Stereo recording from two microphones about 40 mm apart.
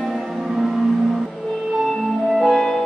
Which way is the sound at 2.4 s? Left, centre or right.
Centre.